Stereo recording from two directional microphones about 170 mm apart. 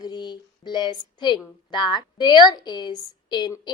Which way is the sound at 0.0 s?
25° left (ahead or behind).